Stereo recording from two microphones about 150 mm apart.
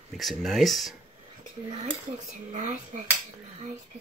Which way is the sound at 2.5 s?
55° right (ahead or behind).